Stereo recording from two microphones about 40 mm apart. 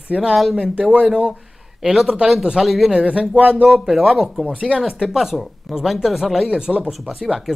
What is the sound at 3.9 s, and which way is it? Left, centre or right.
Speech, centre.